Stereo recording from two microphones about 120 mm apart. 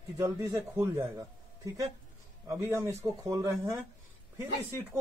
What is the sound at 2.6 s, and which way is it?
A man's voice, 25° right (ahead or behind).